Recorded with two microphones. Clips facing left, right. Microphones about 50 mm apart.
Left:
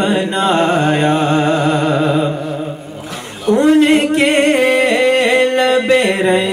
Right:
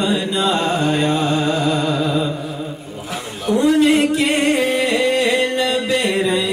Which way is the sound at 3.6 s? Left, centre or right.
Left.